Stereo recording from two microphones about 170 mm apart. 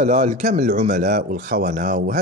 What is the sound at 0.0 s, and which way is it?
Speech, 45° right (ahead or behind).